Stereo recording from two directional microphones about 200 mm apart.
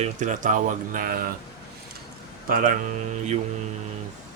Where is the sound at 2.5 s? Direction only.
40° right (ahead or behind).